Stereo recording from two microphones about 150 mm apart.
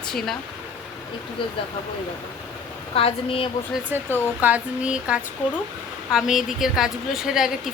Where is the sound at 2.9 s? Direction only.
40° left (ahead or behind).